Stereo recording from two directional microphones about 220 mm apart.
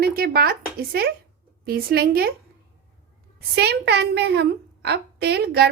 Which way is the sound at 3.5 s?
50° right (ahead or behind).